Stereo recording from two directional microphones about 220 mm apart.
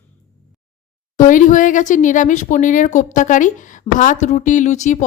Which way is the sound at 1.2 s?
35° left (ahead or behind).